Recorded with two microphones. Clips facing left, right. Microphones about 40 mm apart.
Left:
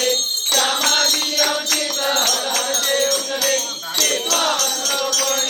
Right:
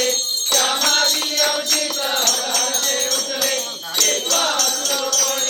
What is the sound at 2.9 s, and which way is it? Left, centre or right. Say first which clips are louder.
Music: left 4 dB; centre.